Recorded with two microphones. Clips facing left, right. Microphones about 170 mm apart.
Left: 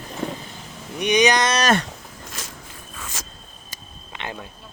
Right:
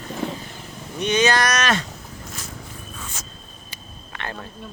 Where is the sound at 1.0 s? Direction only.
15° left (ahead or behind).